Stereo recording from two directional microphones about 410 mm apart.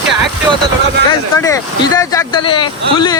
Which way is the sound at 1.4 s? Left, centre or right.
Centre.